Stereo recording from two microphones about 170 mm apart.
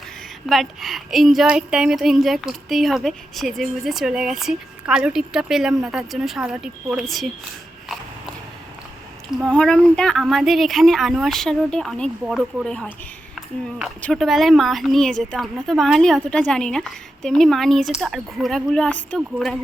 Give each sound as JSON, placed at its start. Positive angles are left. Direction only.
{"t": 0.4, "sound": "speech", "side_deg": 0}
{"t": 9.4, "sound": "speech", "side_deg": 5}
{"t": 14.0, "sound": "speech", "side_deg": 0}